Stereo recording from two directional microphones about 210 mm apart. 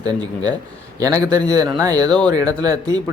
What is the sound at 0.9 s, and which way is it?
Speech, 15° right (ahead or behind).